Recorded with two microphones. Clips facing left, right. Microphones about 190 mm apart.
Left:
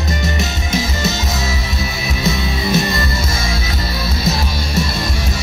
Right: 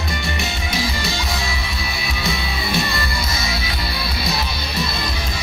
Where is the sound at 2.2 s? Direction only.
40° left (ahead or behind).